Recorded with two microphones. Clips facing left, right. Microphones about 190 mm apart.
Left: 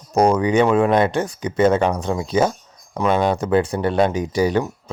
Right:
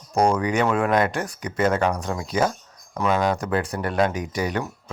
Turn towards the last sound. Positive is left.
turn(degrees=30)  # may be behind; listen again after turning